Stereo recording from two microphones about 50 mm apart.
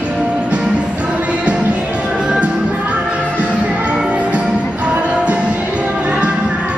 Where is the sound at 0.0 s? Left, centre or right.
Right.